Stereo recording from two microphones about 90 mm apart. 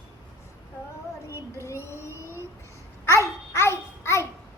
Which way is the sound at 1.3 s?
30° left (ahead or behind).